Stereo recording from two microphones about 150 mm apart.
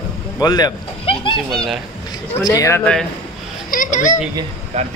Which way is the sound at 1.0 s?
35° left (ahead or behind).